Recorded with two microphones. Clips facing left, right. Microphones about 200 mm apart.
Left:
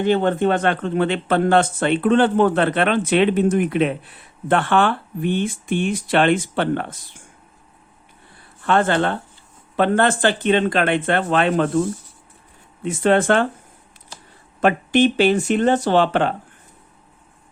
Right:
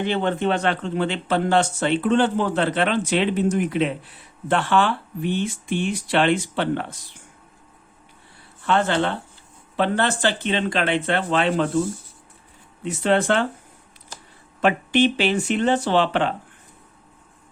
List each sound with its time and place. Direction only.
0.0 s speech: 45° left (ahead or behind)
8.6 s speech: 50° left (ahead or behind)
12.8 s speech: 50° left (ahead or behind)
14.6 s speech: 45° left (ahead or behind)